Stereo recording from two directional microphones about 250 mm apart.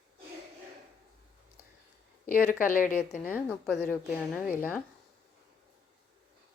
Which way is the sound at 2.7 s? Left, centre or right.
Left.